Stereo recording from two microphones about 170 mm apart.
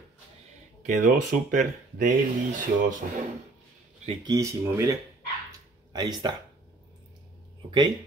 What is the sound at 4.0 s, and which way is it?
Speech, 40° right (ahead or behind).